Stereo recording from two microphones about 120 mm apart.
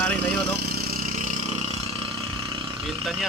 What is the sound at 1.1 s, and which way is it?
Vehicle, 80° right.